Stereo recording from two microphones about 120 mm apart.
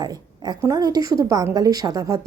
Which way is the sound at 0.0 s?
35° right (ahead or behind).